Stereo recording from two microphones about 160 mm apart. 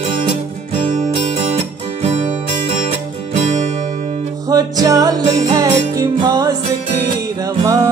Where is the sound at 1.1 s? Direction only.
40° right (ahead or behind).